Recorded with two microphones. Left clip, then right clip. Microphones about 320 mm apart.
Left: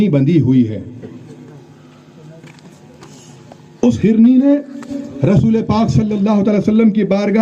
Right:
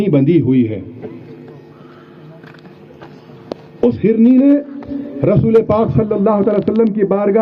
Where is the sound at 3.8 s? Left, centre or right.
Left.